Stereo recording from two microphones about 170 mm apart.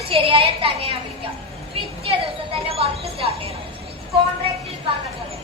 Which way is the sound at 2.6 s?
35° right (ahead or behind).